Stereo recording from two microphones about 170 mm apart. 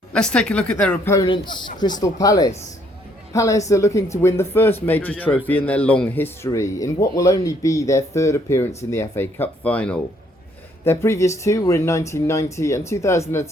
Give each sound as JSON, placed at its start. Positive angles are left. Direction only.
{"t": 0.1, "sound": "speech", "side_deg": 5}